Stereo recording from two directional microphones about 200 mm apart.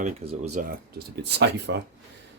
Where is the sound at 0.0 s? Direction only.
35° right (ahead or behind); by 1.8 s 60° right (ahead or behind).